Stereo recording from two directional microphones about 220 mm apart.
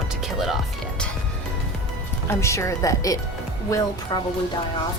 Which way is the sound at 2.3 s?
15° left (ahead or behind).